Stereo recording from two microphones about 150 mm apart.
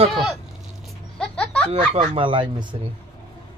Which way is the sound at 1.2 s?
5° left (ahead or behind).